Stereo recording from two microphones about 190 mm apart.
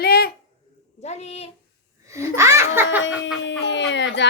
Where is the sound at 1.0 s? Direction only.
35° left (ahead or behind).